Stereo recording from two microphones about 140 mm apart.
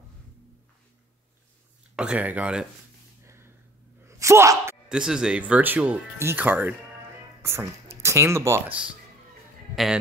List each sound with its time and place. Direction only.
2.0 s speech: 10° right (ahead or behind)
3.3 s a sound: 20° right (ahead or behind)
4.0 s gasp: 20° right (ahead or behind)
4.8 s speech: 5° right (ahead or behind)
9.8 s a man's voice: centre (ahead or behind)